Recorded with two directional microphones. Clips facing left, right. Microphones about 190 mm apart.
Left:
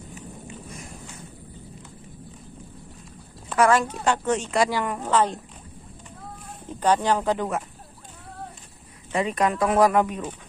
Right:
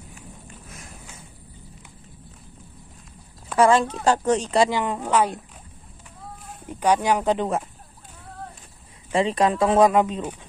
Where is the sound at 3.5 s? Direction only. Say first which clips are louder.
Right 2 dB; 30° right (ahead or behind).